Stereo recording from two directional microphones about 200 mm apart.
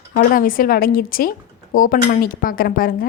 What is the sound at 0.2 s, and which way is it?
Speech, 45° left (ahead or behind).